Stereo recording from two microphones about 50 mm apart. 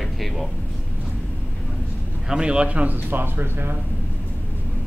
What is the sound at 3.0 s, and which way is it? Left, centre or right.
Speech, right.